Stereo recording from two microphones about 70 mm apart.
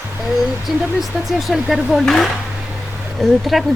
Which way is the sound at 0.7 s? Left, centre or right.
Centre.